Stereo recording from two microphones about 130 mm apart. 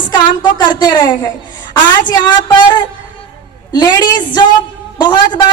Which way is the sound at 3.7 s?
30° left (ahead or behind).